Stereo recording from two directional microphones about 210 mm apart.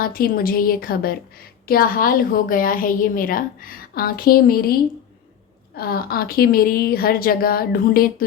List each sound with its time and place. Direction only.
0.0 s a woman's voice: 45° left (ahead or behind)